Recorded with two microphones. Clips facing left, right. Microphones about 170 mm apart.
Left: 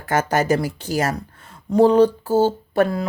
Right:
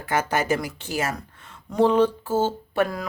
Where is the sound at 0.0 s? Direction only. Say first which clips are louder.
Left 4 dB; 45° left (ahead or behind).